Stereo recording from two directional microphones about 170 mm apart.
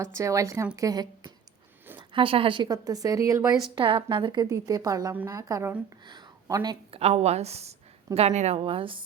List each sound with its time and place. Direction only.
0.0 s a woman's voice: 20° right (ahead or behind)
3.8 s a woman's voice: 30° right (ahead or behind)
7.0 s a woman's voice: 40° right (ahead or behind)